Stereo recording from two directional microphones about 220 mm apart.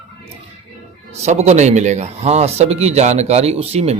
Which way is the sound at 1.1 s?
30° right (ahead or behind).